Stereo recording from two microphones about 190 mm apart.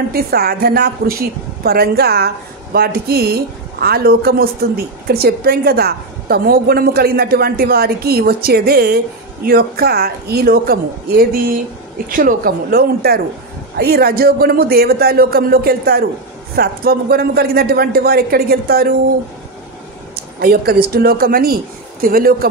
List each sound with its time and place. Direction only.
0.1 s speech: 55° right (ahead or behind)
20.3 s speech: 55° right (ahead or behind)